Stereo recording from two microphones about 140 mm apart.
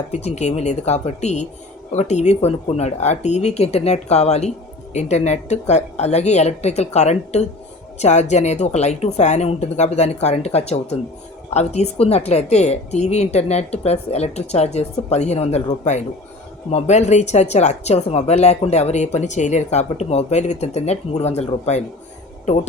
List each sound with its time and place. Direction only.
0.1 s speech: 50° left (ahead or behind)